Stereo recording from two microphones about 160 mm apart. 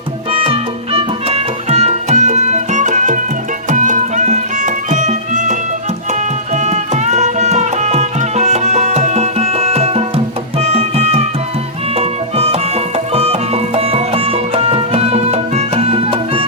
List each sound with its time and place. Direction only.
0.3 s music: 35° right (ahead or behind)
6.6 s music: 45° right (ahead or behind)